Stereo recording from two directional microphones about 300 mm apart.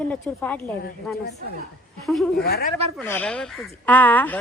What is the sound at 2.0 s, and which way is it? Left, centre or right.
Speech, centre.